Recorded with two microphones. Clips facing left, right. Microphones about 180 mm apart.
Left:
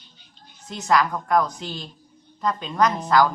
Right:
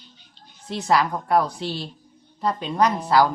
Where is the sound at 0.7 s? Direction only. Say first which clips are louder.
Even; 30° right (ahead or behind).